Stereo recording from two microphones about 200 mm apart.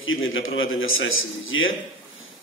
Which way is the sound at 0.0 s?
80° left.